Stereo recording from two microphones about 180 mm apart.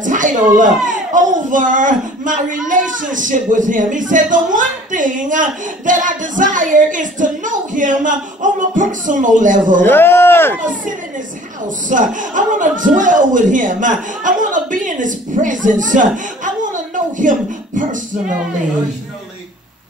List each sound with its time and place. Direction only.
0.0 s a sound: 45° right (ahead or behind)
0.8 s speech: 45° right (ahead or behind)
9.8 s speech: 10° left (ahead or behind)
10.6 s a man's voice: 45° right (ahead or behind)